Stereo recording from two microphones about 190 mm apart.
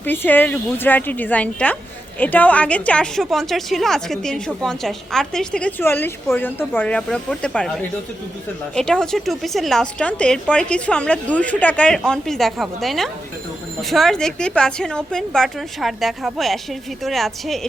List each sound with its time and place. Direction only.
0.0 s a woman's voice: 10° left (ahead or behind)